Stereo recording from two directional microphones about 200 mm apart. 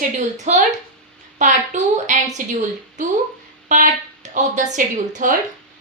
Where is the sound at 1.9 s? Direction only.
35° right (ahead or behind).